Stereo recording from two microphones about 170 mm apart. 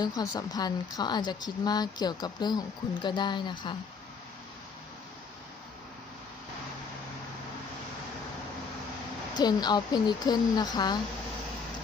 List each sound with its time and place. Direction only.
0.0 s a woman's voice: 25° left (ahead or behind)
9.4 s a woman's voice: 25° left (ahead or behind)